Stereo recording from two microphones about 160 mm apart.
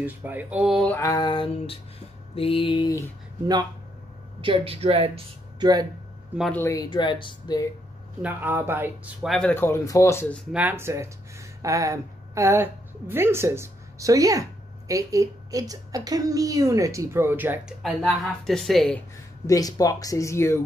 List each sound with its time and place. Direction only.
0.0 s speech: 10° right (ahead or behind)
0.7 s a sound: 5° left (ahead or behind)
1.0 s speech: 25° left (ahead or behind)
2.3 s mantra: 35° left (ahead or behind)
4.4 s speech: 35° right (ahead or behind)
6.5 s speech: 20° left (ahead or behind)
8.2 s speech: 10° right (ahead or behind); by 10.2 s 20° left (ahead or behind)
10.5 s a woman's voice: 10° right (ahead or behind)
17.8 s speech: centre (ahead or behind)
19.4 s speech: 20° left (ahead or behind)